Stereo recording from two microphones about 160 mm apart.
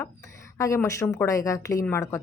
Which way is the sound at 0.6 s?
20° left (ahead or behind).